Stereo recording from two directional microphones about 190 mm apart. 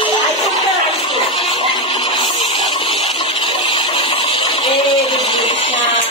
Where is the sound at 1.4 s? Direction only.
30° left (ahead or behind).